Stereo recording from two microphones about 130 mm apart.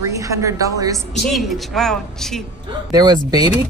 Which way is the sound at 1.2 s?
Centre (ahead or behind).